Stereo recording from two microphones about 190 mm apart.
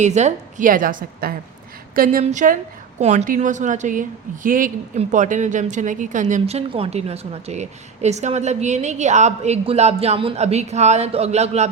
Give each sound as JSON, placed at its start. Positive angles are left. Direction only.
{"t": 0.0, "sound": "a woman's voice", "side_deg": -35}